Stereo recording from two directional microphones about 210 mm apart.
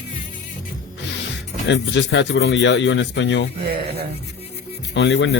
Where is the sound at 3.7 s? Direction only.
45° right (ahead or behind).